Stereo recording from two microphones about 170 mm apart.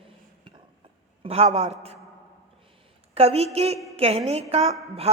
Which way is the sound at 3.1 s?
40° right (ahead or behind).